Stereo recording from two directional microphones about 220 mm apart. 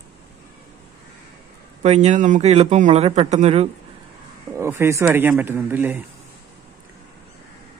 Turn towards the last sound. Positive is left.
turn(degrees=-10)  # may be behind; listen again after turning